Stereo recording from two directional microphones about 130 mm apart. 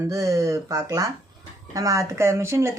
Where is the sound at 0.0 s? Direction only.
25° right (ahead or behind).